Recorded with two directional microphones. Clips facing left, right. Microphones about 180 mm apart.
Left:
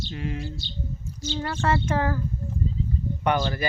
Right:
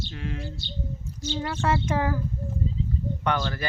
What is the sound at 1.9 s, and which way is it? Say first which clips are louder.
Speech: left 1 dB; 10° right (ahead or behind).